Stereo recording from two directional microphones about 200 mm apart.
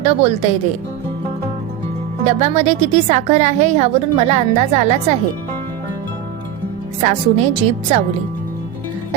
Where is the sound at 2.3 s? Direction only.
35° right (ahead or behind).